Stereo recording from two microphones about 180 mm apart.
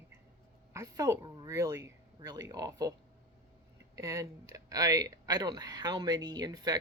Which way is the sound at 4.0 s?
15° right (ahead or behind).